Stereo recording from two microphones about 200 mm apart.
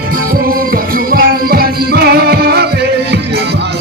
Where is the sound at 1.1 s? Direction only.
50° right (ahead or behind).